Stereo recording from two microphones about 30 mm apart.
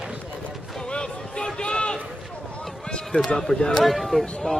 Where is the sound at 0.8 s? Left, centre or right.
Left.